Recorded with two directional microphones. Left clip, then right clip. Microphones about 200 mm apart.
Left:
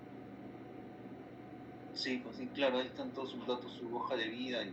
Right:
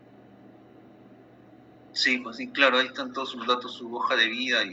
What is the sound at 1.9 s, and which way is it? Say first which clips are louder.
A woman's voice: right 15 dB; 45° right (ahead or behind).